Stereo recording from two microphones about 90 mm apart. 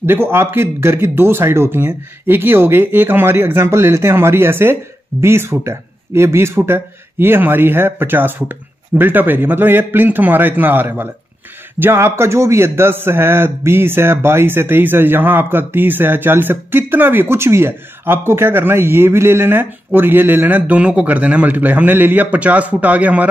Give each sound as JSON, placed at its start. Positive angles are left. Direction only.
{"t": 0.0, "sound": "a man's voice", "side_deg": -25}